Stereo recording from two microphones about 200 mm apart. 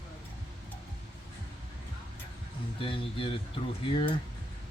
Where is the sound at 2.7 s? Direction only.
25° left (ahead or behind).